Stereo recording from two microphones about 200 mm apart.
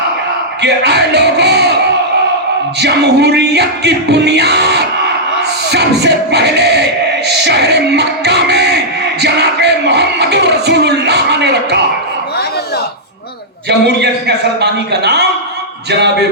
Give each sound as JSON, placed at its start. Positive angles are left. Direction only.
{"t": 0.6, "sound": "bellow", "side_deg": -55}
{"t": 2.8, "sound": "music", "side_deg": -55}
{"t": 13.7, "sound": "music", "side_deg": -55}